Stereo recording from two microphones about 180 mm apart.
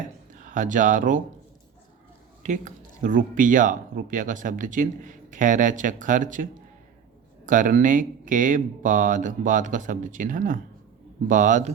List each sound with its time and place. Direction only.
0.3 s speech: 45° right (ahead or behind)
2.4 s speech: 40° right (ahead or behind)